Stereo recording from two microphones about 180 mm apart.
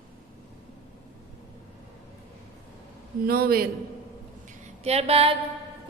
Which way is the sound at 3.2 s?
55° right (ahead or behind).